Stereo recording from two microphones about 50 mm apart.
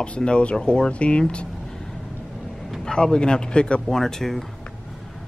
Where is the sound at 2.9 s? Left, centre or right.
Centre.